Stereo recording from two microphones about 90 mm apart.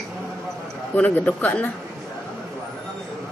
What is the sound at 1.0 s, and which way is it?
Speech, 15° left (ahead or behind).